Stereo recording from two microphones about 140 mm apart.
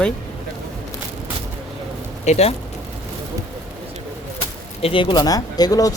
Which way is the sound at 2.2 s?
50° left (ahead or behind).